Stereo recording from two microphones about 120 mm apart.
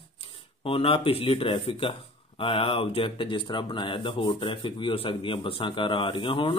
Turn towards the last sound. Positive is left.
turn(degrees=45)  # may be behind; listen again after turning